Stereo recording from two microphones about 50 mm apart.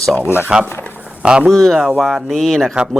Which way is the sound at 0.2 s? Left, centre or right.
Left.